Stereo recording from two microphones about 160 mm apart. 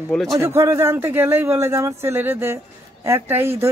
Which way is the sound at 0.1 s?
Centre (ahead or behind).